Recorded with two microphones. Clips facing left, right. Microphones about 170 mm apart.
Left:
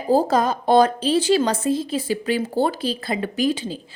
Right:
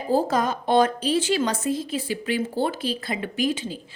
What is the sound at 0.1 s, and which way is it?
A woman's voice, 35° left (ahead or behind).